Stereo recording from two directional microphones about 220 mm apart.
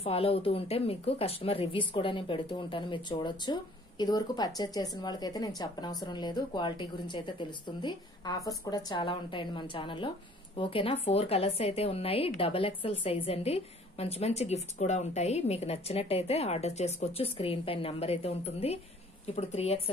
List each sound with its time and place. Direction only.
0.0 s a woman's voice: 25° left (ahead or behind)